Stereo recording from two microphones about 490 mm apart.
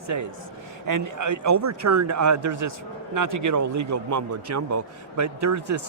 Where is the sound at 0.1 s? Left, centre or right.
Right.